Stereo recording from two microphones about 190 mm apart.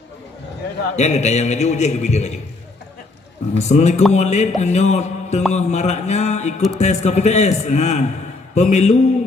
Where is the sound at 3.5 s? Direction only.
35° left (ahead or behind).